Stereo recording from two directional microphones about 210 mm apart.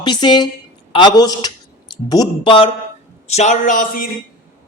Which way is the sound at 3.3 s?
35° left (ahead or behind).